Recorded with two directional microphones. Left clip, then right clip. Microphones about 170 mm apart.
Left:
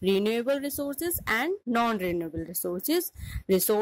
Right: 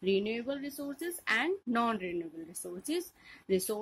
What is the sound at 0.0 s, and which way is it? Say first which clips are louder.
A woman's voice: left 6 dB; 45° left (ahead or behind).